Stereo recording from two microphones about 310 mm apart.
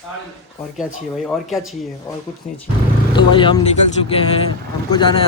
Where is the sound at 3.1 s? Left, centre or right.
Centre.